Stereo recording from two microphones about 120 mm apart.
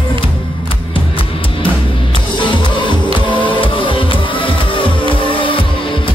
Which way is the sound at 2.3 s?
40° left (ahead or behind).